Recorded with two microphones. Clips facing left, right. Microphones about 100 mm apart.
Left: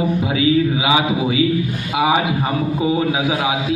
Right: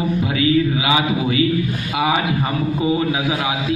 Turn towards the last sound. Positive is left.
turn(degrees=10)  # may be behind; listen again after turning